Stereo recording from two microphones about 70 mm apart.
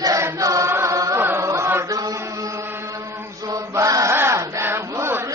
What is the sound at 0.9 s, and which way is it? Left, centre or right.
Chant, right.